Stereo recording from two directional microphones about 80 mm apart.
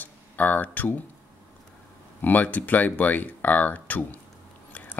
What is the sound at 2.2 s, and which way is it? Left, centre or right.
Speech, left.